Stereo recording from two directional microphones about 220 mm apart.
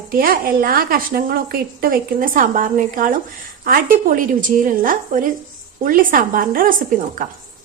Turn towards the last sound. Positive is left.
turn(degrees=-40)  # may be behind; listen again after turning